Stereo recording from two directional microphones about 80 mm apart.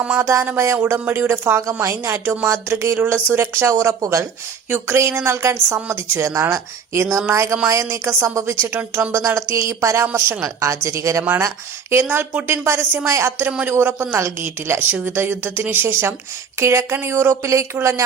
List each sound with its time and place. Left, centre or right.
0.2 s a woman's voice: right
0.9 s a woman's voice: right
2.2 s a woman's voice: right
2.5 s a woman's voice: right
9.1 s a woman's voice: right
10.4 s a woman's voice: right
11.2 s a woman's voice: right
12.0 s a woman's voice: right